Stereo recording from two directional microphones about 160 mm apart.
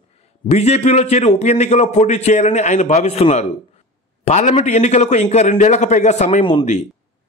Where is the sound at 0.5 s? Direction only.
45° left (ahead or behind).